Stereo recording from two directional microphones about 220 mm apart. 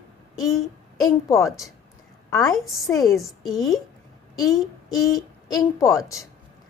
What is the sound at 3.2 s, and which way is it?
Female singing, centre (ahead or behind).